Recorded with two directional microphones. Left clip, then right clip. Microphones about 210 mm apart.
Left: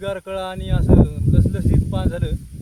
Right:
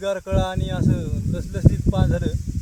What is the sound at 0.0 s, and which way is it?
Speech, 15° left (ahead or behind).